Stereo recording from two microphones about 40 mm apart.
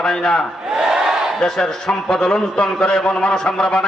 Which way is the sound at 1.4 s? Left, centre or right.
Centre.